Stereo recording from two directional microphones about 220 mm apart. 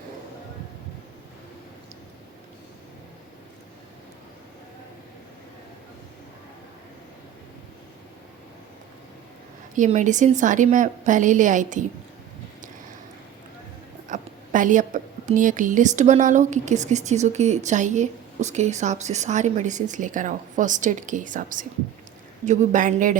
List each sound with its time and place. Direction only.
9.7 s a woman's voice: 35° right (ahead or behind)
14.1 s a woman's voice: 35° right (ahead or behind)